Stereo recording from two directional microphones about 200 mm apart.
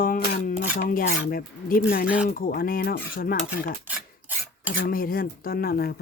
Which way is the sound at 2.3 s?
45° left (ahead or behind).